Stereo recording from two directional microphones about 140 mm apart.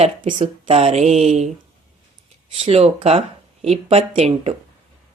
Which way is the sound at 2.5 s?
45° right (ahead or behind).